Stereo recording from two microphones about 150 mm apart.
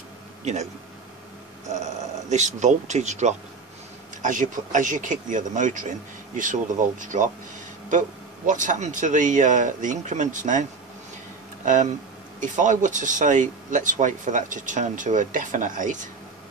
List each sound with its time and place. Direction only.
0.5 s speech: 50° right (ahead or behind)
1.7 s speech: 50° right (ahead or behind)
8.5 s speech: 55° right (ahead or behind)